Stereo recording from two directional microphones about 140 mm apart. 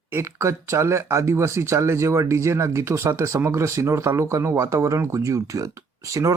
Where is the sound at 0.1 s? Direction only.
20° right (ahead or behind).